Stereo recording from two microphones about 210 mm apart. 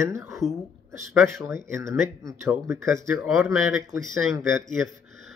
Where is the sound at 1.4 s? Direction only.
15° right (ahead or behind).